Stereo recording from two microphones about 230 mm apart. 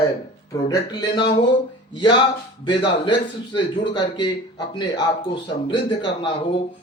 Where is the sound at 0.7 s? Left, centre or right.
Centre.